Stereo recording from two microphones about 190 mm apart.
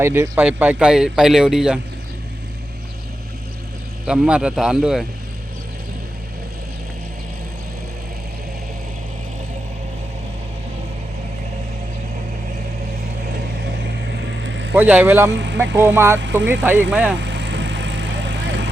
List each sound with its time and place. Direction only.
0.0 s speech: 10° right (ahead or behind)
4.0 s speech: 5° right (ahead or behind)
14.7 s speech: 10° right (ahead or behind)
17.2 s vehicle: 70° right (ahead or behind)